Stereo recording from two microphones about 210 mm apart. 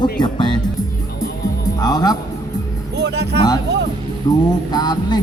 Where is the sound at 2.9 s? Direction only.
50° right (ahead or behind).